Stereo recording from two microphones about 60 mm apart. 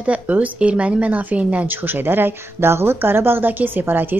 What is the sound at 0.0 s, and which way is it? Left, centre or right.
A woman's voice, right.